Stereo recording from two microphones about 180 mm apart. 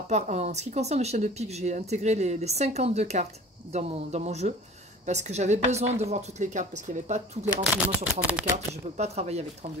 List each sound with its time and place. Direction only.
0.1 s speech: 40° right (ahead or behind)
7.7 s speech: 5° right (ahead or behind)
8.9 s speech: 40° right (ahead or behind)